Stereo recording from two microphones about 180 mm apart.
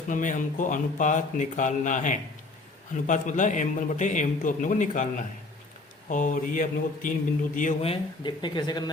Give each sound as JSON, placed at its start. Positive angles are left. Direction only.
{"t": 0.1, "sound": "a man's voice", "side_deg": 45}